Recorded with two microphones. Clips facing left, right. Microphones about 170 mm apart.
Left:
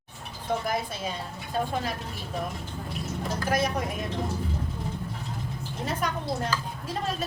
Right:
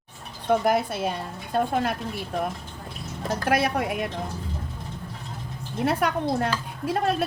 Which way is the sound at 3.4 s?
65° right (ahead or behind).